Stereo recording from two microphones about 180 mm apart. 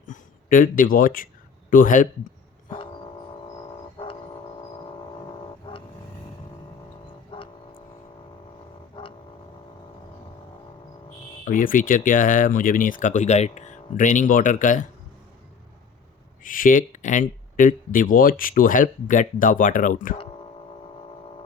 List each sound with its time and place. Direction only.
0.1 s speech: 50° left (ahead or behind)
2.6 s vehicle: 30° left (ahead or behind)
3.9 s a sound: 30° left (ahead or behind)
7.3 s music: 30° left (ahead or behind)
8.9 s a sound: 30° left (ahead or behind)
11.4 s speech: 50° left (ahead or behind)
16.4 s speech: 50° left (ahead or behind)